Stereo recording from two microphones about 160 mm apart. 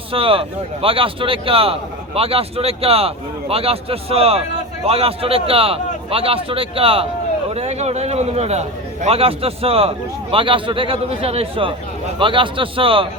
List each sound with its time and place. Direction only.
0.1 s a man's voice: 35° right (ahead or behind)